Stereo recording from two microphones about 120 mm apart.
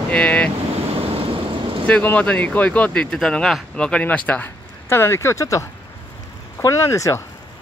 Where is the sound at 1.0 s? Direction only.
50° right (ahead or behind).